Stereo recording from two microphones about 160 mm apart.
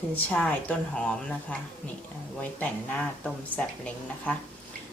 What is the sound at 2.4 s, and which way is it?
Speech, 5° left (ahead or behind).